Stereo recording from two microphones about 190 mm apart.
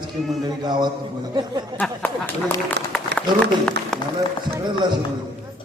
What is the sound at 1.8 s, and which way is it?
A man's voice, 10° left (ahead or behind).